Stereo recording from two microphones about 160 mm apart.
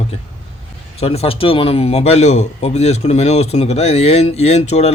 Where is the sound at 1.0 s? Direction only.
40° left (ahead or behind).